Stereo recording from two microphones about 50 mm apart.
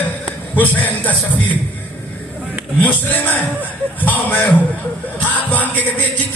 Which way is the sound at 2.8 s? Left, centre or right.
Left.